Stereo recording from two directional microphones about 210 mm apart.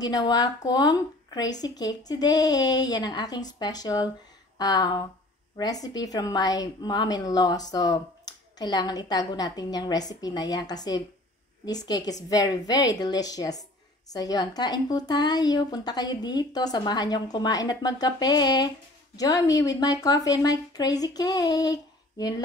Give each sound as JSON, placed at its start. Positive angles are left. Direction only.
{"t": 0.0, "sound": "a woman's voice", "side_deg": 20}